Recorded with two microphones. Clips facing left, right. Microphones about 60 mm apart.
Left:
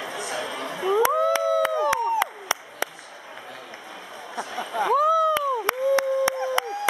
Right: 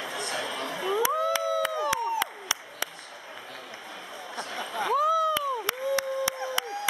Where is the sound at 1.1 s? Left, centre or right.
Left.